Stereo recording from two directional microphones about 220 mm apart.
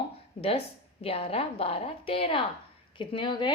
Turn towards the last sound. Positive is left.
turn(degrees=20)  # may be behind; listen again after turning